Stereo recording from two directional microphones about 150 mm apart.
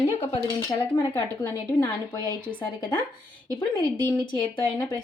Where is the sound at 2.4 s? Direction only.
10° left (ahead or behind).